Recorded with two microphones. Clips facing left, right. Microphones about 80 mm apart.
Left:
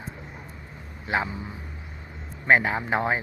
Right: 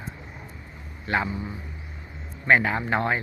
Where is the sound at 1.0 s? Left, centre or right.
Centre.